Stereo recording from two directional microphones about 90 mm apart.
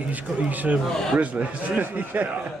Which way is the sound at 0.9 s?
5° left (ahead or behind).